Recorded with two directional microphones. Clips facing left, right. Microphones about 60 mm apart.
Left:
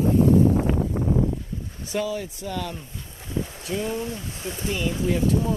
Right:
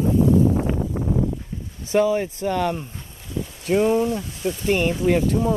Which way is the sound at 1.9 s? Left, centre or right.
Right.